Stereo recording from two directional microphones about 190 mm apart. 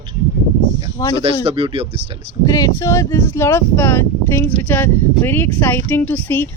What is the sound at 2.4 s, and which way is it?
Speech, 20° left (ahead or behind).